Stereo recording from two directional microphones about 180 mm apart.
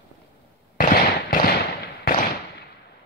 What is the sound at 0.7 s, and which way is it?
Fireworks, 55° left (ahead or behind).